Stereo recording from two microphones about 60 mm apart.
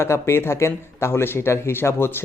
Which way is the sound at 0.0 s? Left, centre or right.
Left.